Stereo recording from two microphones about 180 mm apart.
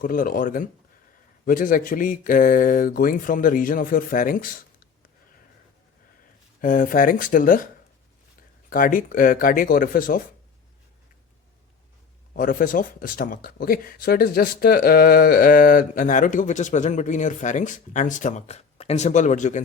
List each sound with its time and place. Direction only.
0.0 s speech: 50° left (ahead or behind)
6.6 s speech: 50° left (ahead or behind)
12.3 s speech: 50° left (ahead or behind)